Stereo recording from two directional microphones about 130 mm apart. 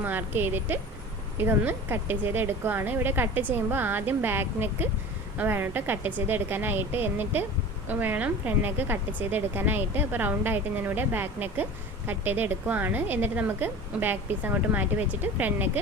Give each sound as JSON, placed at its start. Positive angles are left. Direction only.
{"t": 0.0, "sound": "speech", "side_deg": -15}